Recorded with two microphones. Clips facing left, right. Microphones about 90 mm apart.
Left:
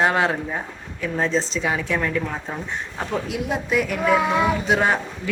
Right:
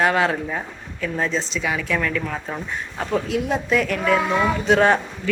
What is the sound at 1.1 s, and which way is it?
A woman's voice, 30° left (ahead or behind).